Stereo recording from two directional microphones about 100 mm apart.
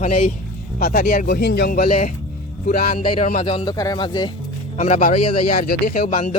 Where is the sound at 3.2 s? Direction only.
70° left (ahead or behind).